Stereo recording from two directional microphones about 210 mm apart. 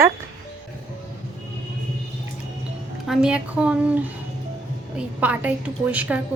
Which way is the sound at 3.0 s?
5° right (ahead or behind).